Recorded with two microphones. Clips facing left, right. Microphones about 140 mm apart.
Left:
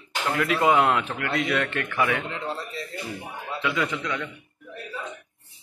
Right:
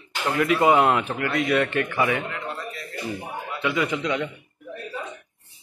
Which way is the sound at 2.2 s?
25° left (ahead or behind).